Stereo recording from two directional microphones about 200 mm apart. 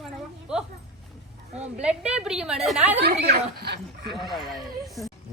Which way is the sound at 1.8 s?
5° right (ahead or behind).